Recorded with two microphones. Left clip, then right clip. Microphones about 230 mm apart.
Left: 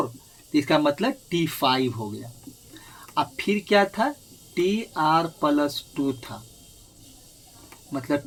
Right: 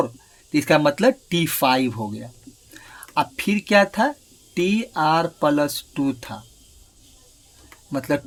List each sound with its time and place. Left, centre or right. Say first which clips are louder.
0.5 s speech: right 3 dB; right
3.2 s speech: right 3 dB; right
7.9 s speech: right 3 dB; right